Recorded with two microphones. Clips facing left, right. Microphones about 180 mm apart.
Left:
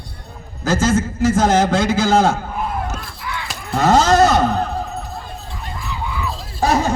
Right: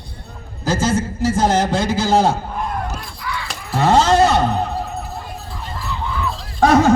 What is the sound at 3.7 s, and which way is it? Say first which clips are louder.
Speech: even; 45° left (ahead or behind).